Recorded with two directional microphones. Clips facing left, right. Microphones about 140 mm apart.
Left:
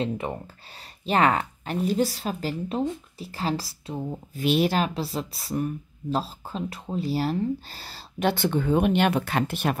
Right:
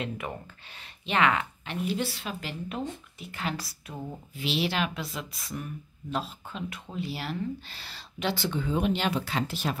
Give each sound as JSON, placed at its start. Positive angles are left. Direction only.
{"t": 0.0, "sound": "speech", "side_deg": 30}
{"t": 4.4, "sound": "speech", "side_deg": 45}
{"t": 8.3, "sound": "speech", "side_deg": 55}